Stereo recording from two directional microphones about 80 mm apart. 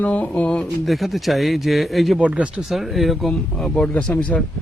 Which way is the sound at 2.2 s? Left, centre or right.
Centre.